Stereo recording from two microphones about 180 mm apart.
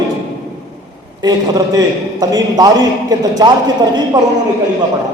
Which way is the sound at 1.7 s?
20° right (ahead or behind).